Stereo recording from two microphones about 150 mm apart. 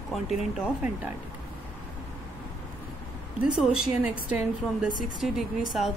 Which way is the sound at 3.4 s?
5° right (ahead or behind).